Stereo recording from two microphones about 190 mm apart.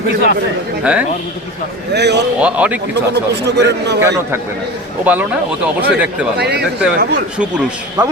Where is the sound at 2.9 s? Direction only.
60° right (ahead or behind).